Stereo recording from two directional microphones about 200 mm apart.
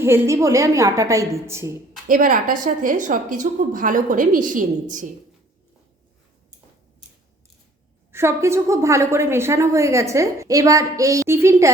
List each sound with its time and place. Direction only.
0.0 s a woman's voice: 15° right (ahead or behind)
2.0 s a woman's voice: 45° right (ahead or behind)
8.1 s a woman's voice: 15° right (ahead or behind)